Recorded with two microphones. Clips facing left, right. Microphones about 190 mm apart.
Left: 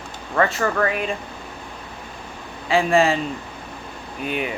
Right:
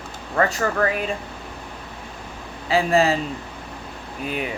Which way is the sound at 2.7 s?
35° right (ahead or behind).